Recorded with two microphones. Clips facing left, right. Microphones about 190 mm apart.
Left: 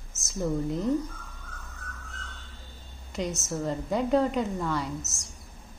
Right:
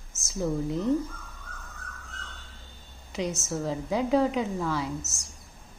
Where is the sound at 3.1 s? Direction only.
Centre (ahead or behind).